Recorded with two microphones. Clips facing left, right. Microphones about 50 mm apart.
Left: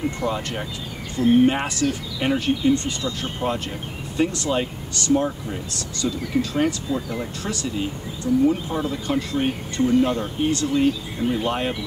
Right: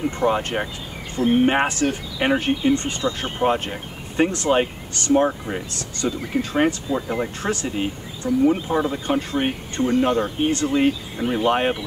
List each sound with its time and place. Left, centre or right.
0.2 s speech: right